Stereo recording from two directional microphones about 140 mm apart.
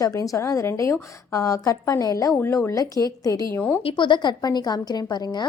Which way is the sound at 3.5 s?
10° left (ahead or behind).